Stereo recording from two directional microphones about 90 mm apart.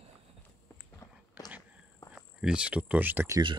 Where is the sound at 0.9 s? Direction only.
45° left (ahead or behind).